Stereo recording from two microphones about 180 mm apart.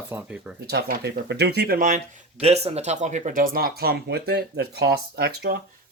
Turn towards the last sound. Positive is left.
turn(degrees=-60)  # may be behind; listen again after turning